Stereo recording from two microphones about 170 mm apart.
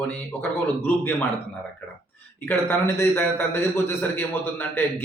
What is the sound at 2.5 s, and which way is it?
A man's voice, 15° left (ahead or behind).